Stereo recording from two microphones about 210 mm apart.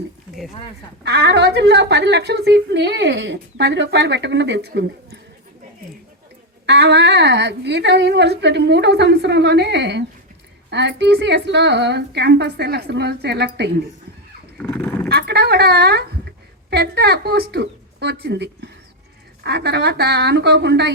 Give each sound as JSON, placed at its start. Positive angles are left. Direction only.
{"t": 1.0, "sound": "a woman's voice", "side_deg": -50}
{"t": 6.7, "sound": "a woman's voice", "side_deg": -50}
{"t": 14.6, "sound": "dog", "side_deg": 10}
{"t": 15.1, "sound": "a woman's voice", "side_deg": -50}